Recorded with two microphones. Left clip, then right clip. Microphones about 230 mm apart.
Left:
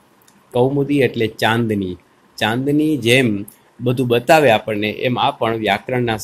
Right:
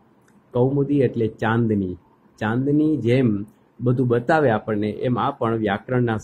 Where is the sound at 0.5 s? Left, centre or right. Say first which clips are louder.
Left 4 dB; centre.